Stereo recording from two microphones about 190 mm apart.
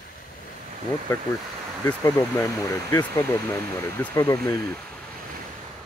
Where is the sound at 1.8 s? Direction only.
15° left (ahead or behind).